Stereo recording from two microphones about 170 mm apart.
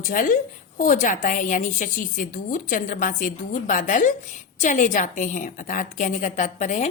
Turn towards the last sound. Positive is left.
turn(degrees=45)  # may be behind; listen again after turning